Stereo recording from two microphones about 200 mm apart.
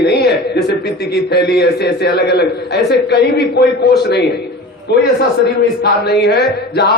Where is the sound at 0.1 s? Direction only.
55° left (ahead or behind).